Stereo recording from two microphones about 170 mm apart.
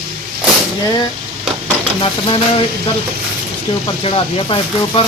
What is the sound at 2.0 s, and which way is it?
Speech, 30° left (ahead or behind).